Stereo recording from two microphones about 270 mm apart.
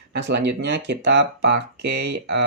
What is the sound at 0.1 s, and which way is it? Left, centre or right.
Speech, right.